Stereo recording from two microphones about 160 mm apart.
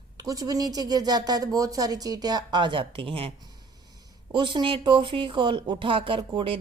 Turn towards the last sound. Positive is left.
turn(degrees=-30)  # may be behind; listen again after turning